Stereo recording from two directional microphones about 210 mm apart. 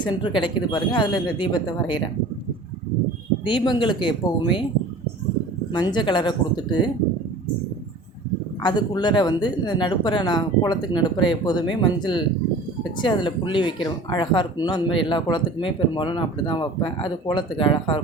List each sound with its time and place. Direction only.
0.0 s speech: 20° left (ahead or behind)
3.4 s speech: 20° left (ahead or behind)
5.7 s speech: 20° left (ahead or behind)
8.6 s speech: 20° left (ahead or behind)